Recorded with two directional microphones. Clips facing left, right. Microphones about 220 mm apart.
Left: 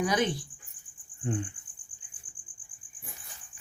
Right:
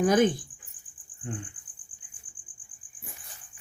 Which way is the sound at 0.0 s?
50° right (ahead or behind).